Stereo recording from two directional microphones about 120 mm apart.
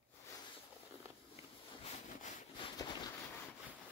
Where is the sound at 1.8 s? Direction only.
90° left.